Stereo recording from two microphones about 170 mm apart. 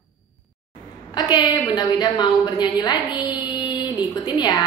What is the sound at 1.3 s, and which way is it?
A woman's voice, 25° left (ahead or behind).